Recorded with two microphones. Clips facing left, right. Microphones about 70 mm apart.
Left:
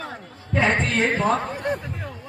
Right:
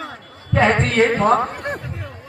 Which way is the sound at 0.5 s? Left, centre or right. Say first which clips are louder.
Right 5 dB; right.